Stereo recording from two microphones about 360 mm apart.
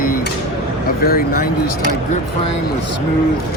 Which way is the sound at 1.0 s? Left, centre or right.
Left.